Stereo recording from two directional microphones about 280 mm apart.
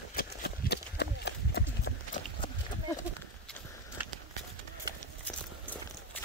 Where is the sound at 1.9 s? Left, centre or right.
Left.